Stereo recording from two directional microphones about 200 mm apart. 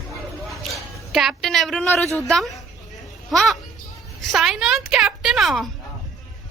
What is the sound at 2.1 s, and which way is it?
A woman's voice, centre (ahead or behind).